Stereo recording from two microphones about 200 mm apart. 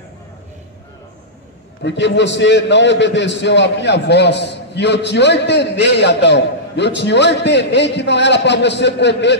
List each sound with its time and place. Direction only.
1.8 s a man's voice: 60° left (ahead or behind)